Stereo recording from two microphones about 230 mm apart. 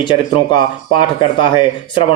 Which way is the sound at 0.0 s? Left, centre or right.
Centre.